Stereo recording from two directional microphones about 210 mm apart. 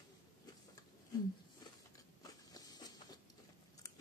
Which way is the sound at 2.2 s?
15° left (ahead or behind).